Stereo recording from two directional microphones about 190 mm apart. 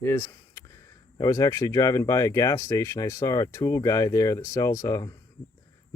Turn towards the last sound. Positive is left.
turn(degrees=15)  # may be behind; listen again after turning